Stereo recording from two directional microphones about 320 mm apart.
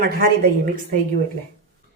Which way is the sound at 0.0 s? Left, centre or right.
Right.